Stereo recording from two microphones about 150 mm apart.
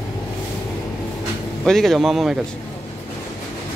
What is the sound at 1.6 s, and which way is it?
Speech, centre (ahead or behind).